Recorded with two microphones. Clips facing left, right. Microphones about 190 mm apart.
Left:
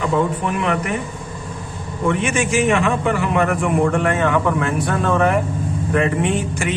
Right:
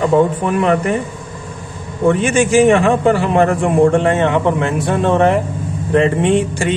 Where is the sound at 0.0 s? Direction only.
35° right (ahead or behind).